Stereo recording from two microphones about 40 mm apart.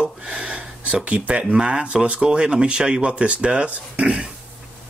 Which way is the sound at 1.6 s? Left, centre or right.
Right.